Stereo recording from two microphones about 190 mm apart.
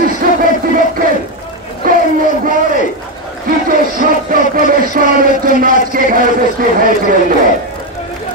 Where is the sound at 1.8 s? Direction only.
50° right (ahead or behind).